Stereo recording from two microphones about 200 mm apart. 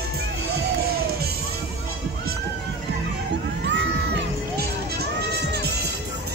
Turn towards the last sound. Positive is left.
turn(degrees=-55)  # may be behind; listen again after turning